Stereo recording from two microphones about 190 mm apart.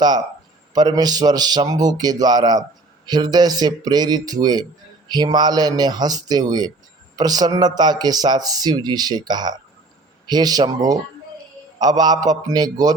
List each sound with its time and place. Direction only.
0.7 s speech: 20° right (ahead or behind)